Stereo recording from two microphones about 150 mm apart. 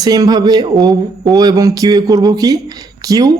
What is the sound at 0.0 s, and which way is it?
Speech, 25° right (ahead or behind).